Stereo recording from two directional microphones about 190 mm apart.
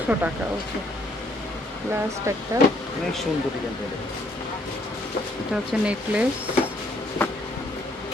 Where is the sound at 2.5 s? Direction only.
15° right (ahead or behind).